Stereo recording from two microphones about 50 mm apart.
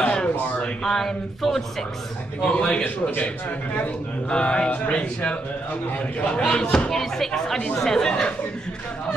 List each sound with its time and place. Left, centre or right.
0.0 s a sound: left
2.4 s speech: centre
2.8 s a man's voice: left
4.3 s speech: centre
6.4 s speech: centre